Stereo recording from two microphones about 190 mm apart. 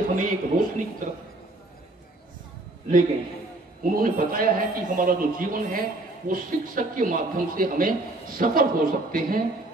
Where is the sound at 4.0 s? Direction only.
50° right (ahead or behind).